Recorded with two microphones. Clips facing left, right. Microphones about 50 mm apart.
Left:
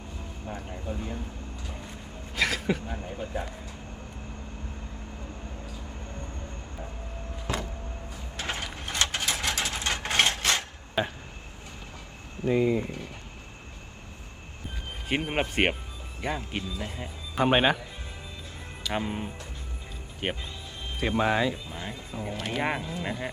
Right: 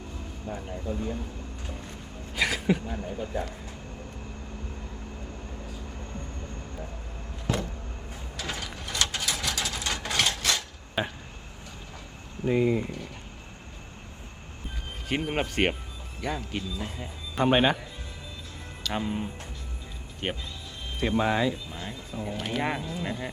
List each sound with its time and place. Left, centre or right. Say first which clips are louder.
0.5 s speech: right 2 dB; left
2.3 s a sound: right 1 dB; centre
2.9 s speech: right 2 dB; centre
7.5 s vehicle: right 2 dB; left
8.4 s mechanisms: left 2 dB; left
11.0 s speech: left 2 dB; centre
12.5 s speech: even; centre
15.1 s speech: left 1 dB; left
17.3 s speech: even; centre
18.8 s speech: even; centre
22.4 s speech: right 1 dB; centre
22.8 s speech: even; left